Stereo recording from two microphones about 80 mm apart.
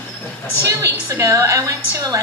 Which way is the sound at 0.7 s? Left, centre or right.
Right.